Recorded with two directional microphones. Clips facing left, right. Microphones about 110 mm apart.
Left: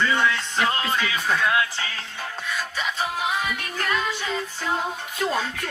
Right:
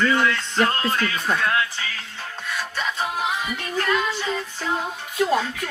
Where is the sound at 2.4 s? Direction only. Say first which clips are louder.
Right 2 dB; 5° left (ahead or behind).